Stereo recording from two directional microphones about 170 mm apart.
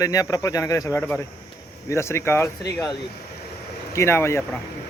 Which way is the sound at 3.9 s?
15° left (ahead or behind).